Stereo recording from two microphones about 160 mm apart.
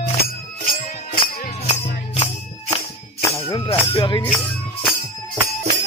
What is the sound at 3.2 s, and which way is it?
Music, 20° left (ahead or behind).